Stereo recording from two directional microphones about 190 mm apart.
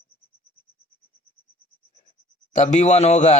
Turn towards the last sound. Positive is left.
turn(degrees=35)  # may be behind; listen again after turning